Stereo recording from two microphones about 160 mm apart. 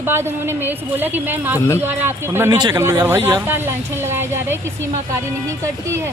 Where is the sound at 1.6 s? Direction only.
15° left (ahead or behind).